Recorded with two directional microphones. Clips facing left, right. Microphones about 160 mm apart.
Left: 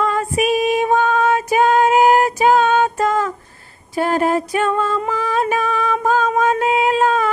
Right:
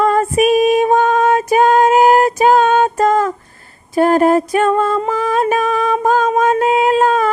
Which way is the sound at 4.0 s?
45° right (ahead or behind).